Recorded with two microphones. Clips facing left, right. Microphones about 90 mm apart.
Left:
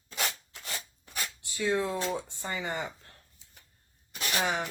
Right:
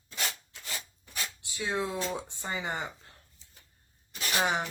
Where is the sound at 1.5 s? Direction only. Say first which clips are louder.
Left 3 dB; 20° right (ahead or behind).